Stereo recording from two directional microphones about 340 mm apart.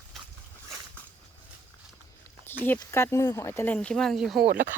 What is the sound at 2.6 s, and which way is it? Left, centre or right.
Speech, centre.